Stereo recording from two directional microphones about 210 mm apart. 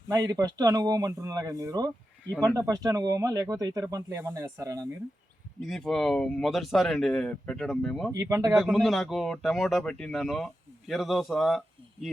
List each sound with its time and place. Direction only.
0.1 s speech: 15° right (ahead or behind)
5.6 s speech: centre (ahead or behind)
8.1 s speech: 15° right (ahead or behind)
8.5 s speech: centre (ahead or behind)